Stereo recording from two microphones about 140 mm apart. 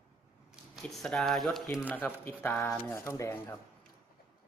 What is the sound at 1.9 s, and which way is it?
Speech, 15° left (ahead or behind).